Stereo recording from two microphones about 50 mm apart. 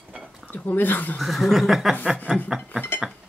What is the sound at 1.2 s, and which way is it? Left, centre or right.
Speech, centre.